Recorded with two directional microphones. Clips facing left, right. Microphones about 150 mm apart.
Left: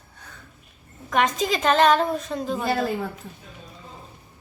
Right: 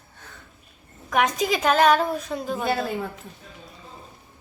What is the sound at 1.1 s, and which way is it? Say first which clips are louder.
A woman's voice: even; 10° right (ahead or behind).